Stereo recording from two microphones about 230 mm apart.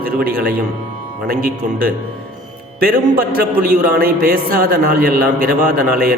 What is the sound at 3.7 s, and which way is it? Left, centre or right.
A man's voice, right.